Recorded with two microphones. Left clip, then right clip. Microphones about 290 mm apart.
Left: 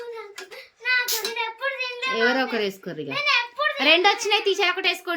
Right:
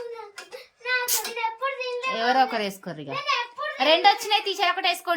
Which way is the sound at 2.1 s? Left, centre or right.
Centre.